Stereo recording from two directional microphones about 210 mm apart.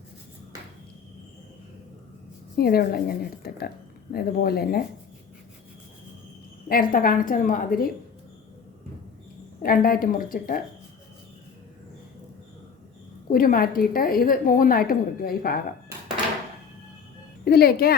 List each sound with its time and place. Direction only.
2.6 s a woman's voice: 45° left (ahead or behind)
6.7 s a woman's voice: 45° left (ahead or behind)
9.6 s a woman's voice: 45° left (ahead or behind)
13.3 s a woman's voice: 40° left (ahead or behind)
17.4 s speech: 45° left (ahead or behind)